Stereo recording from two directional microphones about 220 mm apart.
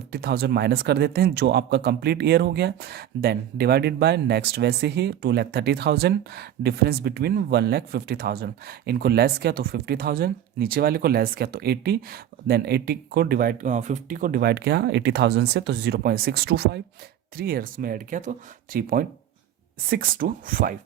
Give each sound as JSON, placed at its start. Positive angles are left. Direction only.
{"t": 0.1, "sound": "speech", "side_deg": -45}